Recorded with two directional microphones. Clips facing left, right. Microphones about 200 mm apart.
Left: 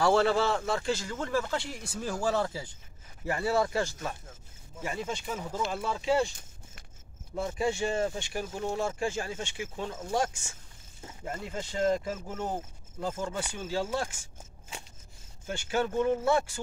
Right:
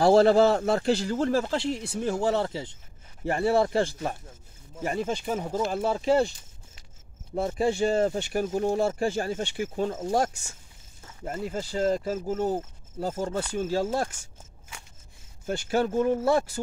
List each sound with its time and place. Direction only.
0.0 s speech: 35° right (ahead or behind)
7.3 s speech: 35° right (ahead or behind)
11.5 s speech: 35° right (ahead or behind)
15.4 s speech: 40° right (ahead or behind)